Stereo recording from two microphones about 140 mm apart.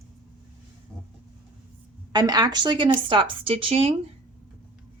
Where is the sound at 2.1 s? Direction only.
30° right (ahead or behind).